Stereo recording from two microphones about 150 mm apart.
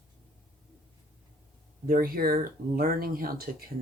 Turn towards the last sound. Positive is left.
turn(degrees=-80)